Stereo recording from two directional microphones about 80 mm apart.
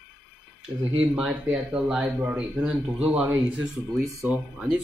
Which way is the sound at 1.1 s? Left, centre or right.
Centre.